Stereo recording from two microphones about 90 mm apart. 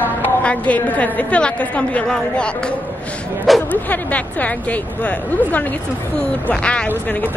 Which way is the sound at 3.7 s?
15° left (ahead or behind).